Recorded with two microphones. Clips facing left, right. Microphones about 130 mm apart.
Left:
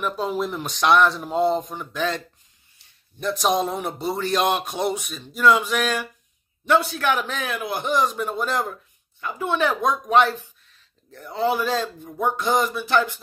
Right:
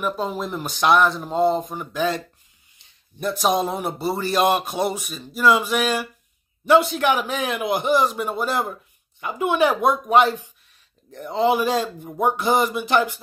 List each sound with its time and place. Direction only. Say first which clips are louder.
0.0 s a man's voice: even; centre (ahead or behind)
6.8 s a man's voice: right 3 dB; 15° right (ahead or behind)